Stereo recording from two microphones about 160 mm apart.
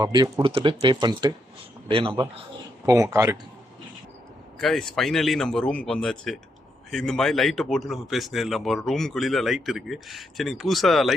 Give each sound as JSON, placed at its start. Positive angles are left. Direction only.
{"t": 0.0, "sound": "a man's voice", "side_deg": -25}
{"t": 2.8, "sound": "speech", "side_deg": -20}
{"t": 4.5, "sound": "speech", "side_deg": 0}